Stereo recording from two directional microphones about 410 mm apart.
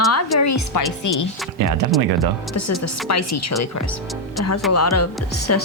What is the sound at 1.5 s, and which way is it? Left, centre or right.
Speech, right.